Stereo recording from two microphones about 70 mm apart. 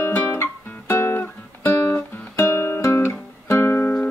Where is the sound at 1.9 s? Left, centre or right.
Left.